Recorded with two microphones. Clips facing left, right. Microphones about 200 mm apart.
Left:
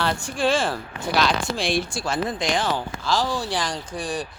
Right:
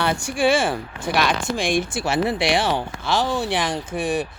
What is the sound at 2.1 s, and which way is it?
Speech, 70° right (ahead or behind).